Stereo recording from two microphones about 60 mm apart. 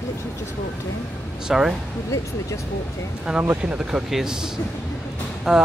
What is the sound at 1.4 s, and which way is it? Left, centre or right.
Speech, centre.